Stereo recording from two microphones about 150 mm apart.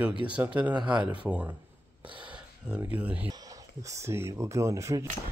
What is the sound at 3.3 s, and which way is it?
Speech, 25° right (ahead or behind).